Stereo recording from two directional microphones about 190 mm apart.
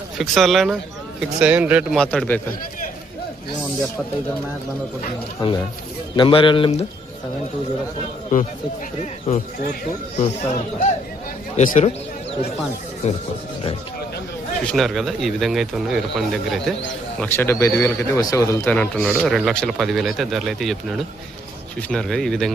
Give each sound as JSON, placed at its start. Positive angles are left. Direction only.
{"t": 0.2, "sound": "a man's voice", "side_deg": 0}
{"t": 6.1, "sound": "speech", "side_deg": 25}
{"t": 8.3, "sound": "speech", "side_deg": 45}
{"t": 14.7, "sound": "a man's voice", "side_deg": 0}
{"t": 17.2, "sound": "a man's voice", "side_deg": 10}